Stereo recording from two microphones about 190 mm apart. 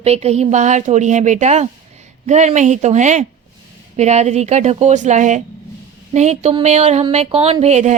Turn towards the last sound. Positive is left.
turn(degrees=-40)  # may be behind; listen again after turning